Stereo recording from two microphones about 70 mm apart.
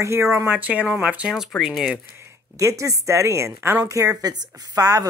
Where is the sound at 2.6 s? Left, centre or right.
Right.